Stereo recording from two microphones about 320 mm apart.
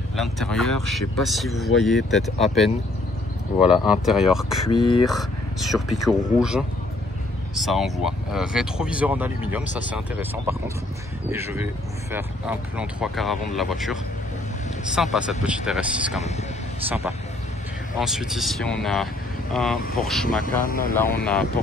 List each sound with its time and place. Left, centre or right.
0.1 s speech: centre
4.6 s speech: centre
5.0 s speech: centre
11.5 s speech: centre
15.0 s speech: centre
16.2 s speech: left
17.9 s speech: centre
20.4 s speech: left
20.9 s speech: centre